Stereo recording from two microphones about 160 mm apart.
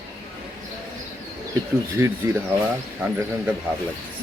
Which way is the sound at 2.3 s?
20° right (ahead or behind).